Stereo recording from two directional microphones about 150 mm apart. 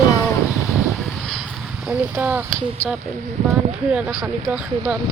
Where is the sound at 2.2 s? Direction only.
10° right (ahead or behind).